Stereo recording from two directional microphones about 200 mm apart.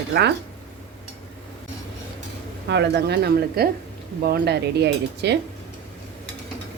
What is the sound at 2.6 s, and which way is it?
Cutlery, 60° right (ahead or behind).